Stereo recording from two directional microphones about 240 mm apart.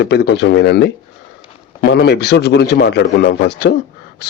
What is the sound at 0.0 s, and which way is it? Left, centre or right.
Speech, left.